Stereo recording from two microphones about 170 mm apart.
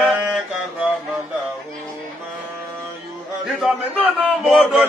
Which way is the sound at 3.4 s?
Centre (ahead or behind).